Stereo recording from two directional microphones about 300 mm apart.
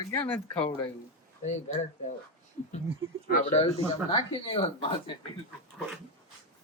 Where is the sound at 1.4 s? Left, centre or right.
Left.